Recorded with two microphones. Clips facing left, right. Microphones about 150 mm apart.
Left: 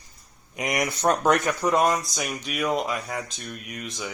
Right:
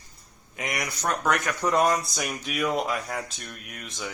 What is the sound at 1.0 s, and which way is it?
Speech, 30° left (ahead or behind).